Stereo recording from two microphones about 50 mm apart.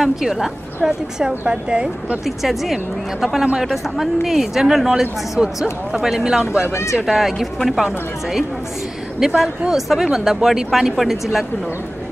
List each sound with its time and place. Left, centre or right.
0.0 s speech: centre
1.5 s a woman's voice: centre
2.2 s a woman's voice: centre
6.7 s speech: left
7.1 s speech: centre